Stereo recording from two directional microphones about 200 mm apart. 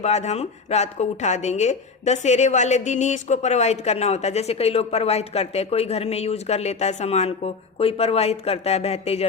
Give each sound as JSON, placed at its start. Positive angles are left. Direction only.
{"t": 0.0, "sound": "a woman's voice", "side_deg": 35}